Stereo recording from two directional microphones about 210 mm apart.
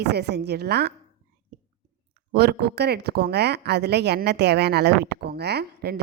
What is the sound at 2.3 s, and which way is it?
A woman's voice, 50° right (ahead or behind).